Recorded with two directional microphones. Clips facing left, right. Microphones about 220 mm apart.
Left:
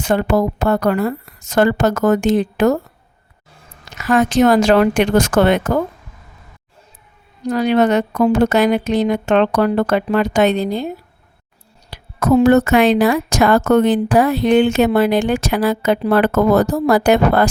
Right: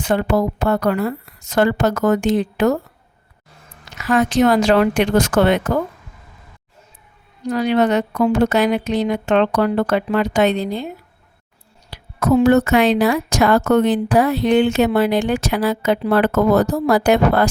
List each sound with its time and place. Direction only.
0.0 s speech: 45° left (ahead or behind)
3.9 s speech: 45° left (ahead or behind)
7.5 s speech: 45° left (ahead or behind)
11.9 s speech: 50° left (ahead or behind)